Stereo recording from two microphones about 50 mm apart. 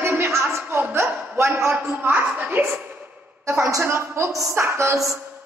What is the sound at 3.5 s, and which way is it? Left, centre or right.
Speech, right.